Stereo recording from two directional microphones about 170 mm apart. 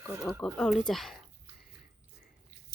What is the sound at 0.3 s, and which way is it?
Speech, 5° left (ahead or behind).